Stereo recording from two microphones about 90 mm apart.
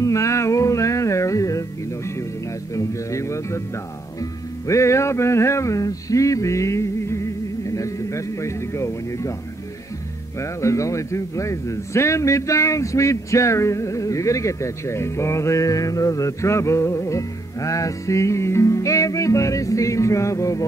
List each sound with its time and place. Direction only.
0.0 s music: 35° left (ahead or behind)
2.7 s speech: 35° left (ahead or behind)
10.4 s speech: 35° left (ahead or behind)